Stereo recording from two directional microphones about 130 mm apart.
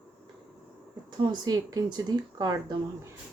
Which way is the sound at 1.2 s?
35° right (ahead or behind).